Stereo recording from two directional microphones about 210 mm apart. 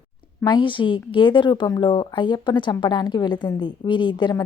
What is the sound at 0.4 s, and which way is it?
A woman's voice, 25° left (ahead or behind).